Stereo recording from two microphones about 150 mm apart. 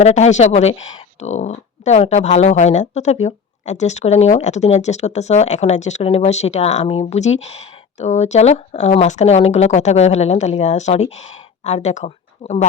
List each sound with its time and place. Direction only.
0.0 s speech: 50° left (ahead or behind)